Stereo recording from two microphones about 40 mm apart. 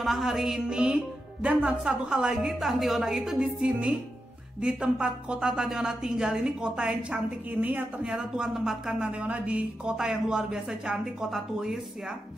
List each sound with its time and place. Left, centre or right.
0.0 s music: centre
0.5 s a woman's voice: right
3.3 s a woman's voice: right
5.5 s a woman's voice: centre; by 8.2 s right
8.5 s music: centre
9.2 s a woman's voice: right
9.9 s a woman's voice: centre